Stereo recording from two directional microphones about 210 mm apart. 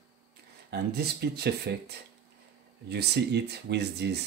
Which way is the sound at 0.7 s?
50° right (ahead or behind).